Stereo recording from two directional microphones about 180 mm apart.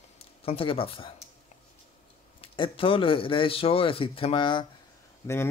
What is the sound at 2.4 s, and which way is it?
Speech, 30° left (ahead or behind).